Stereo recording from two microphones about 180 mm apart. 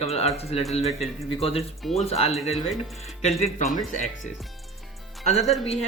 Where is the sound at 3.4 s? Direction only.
40° left (ahead or behind).